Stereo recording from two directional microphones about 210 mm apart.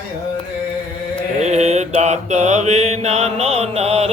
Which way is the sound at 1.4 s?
30° right (ahead or behind).